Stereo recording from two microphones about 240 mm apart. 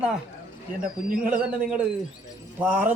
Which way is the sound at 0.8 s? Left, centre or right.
Right.